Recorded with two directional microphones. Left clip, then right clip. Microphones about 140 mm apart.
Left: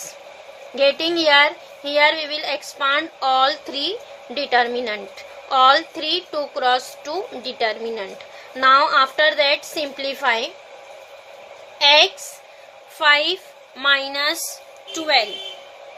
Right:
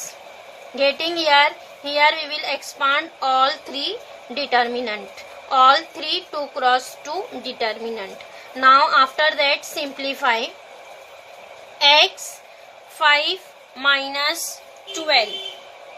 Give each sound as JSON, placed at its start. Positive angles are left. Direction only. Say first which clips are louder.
{"t": 0.8, "sound": "a child's voice", "louder": "left 2 dB", "side_deg": 35}
{"t": 11.8, "sound": "a child's voice", "louder": "even", "side_deg": 25}
{"t": 14.9, "sound": "a woman's voice", "louder": "even", "side_deg": 55}